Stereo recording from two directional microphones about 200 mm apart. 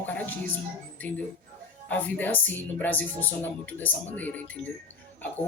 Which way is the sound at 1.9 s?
10° left (ahead or behind).